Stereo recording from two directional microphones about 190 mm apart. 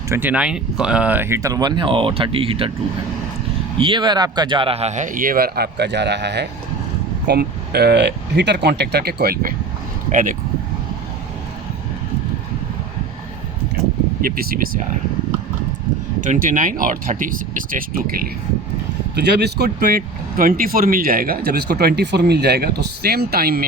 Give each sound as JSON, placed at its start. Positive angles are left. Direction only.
{"t": 0.1, "sound": "speech", "side_deg": -10}
{"t": 3.8, "sound": "a man's voice", "side_deg": -25}
{"t": 14.2, "sound": "speech", "side_deg": -50}
{"t": 16.2, "sound": "a man's voice", "side_deg": -40}
{"t": 19.2, "sound": "speech", "side_deg": -60}